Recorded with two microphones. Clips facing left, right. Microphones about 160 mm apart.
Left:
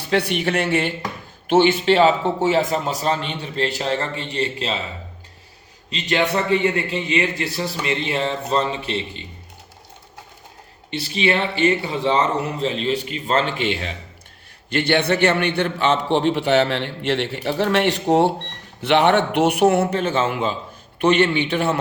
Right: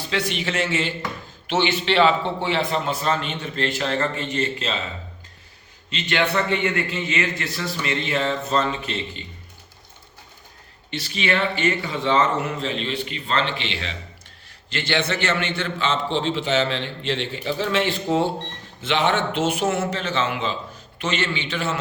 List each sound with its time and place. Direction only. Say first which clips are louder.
0.1 s a man's voice: left 6 dB; 55° left (ahead or behind); by 4.8 s 35° left (ahead or behind)
5.9 s a man's voice: left 2 dB; 35° left (ahead or behind)
11.1 s a man's voice: left 3 dB; 30° left (ahead or behind); by 20.6 s 50° left (ahead or behind)
21.0 s a man's voice: left 9 dB; 60° left (ahead or behind)